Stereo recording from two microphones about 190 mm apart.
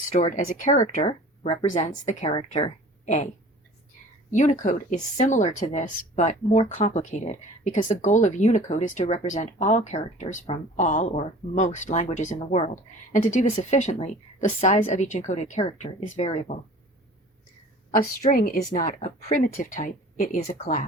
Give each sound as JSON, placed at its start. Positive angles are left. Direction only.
{"t": 0.1, "sound": "speech", "side_deg": 40}
{"t": 4.3, "sound": "speech", "side_deg": 40}
{"t": 17.9, "sound": "a woman's voice", "side_deg": 45}
{"t": 20.5, "sound": "speech", "side_deg": 35}